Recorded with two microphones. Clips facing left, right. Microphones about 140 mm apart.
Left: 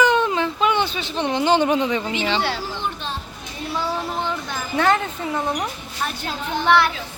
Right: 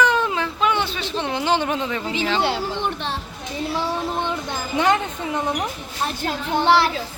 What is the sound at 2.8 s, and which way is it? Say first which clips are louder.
Children playing: right 2 dB; 70° right (ahead or behind).